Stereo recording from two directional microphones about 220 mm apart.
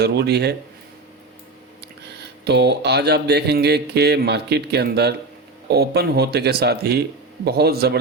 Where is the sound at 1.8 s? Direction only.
50° right (ahead or behind).